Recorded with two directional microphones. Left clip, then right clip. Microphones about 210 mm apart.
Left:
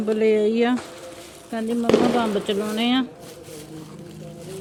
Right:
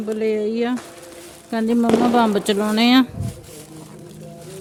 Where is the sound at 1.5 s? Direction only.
30° right (ahead or behind).